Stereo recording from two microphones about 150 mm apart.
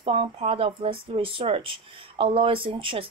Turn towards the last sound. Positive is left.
turn(degrees=-35)  # may be behind; listen again after turning